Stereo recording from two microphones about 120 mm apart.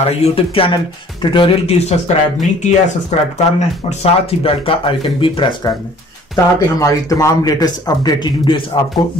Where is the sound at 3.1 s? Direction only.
65° left (ahead or behind).